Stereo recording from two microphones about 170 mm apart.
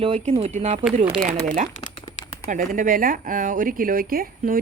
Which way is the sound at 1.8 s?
25° left (ahead or behind).